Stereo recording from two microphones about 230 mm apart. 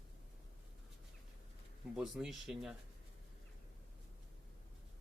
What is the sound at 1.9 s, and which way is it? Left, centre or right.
Speech, centre.